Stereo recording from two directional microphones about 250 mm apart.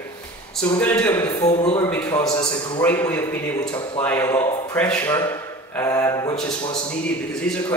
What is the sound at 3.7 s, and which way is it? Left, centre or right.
Speech, centre.